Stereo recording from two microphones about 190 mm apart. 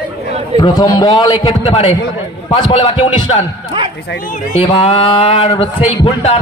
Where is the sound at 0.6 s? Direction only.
20° left (ahead or behind).